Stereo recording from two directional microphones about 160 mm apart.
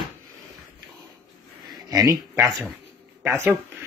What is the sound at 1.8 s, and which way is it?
Speech, 25° right (ahead or behind).